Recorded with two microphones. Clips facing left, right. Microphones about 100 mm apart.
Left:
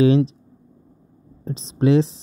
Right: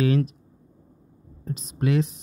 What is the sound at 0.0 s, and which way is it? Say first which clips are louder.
Speech: left 7 dB; 25° left (ahead or behind).